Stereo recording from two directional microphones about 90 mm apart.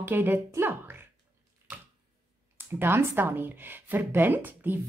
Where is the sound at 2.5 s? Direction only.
25° right (ahead or behind).